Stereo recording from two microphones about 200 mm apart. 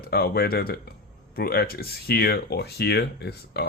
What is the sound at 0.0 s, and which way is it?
Speech, 50° left (ahead or behind).